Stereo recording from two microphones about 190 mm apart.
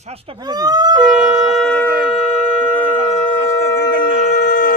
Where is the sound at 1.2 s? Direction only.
20° right (ahead or behind).